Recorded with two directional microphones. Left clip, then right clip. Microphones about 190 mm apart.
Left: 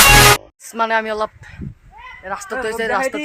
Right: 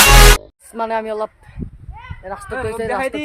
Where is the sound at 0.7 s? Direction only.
Centre (ahead or behind).